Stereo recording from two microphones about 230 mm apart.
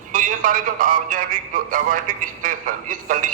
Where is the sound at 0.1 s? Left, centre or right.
Right.